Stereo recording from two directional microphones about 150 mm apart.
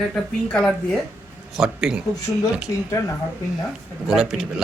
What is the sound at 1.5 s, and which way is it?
Speech, 5° right (ahead or behind).